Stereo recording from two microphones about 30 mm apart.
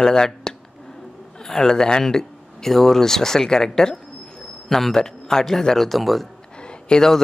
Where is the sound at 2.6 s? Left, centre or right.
Centre.